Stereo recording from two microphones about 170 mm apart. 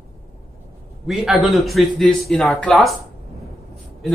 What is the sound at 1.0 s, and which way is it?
A man's voice, centre (ahead or behind).